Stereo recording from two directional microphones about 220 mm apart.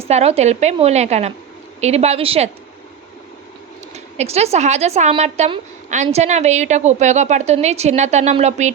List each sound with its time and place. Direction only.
0.0 s a woman's voice: 30° right (ahead or behind)
3.9 s speech: 30° right (ahead or behind)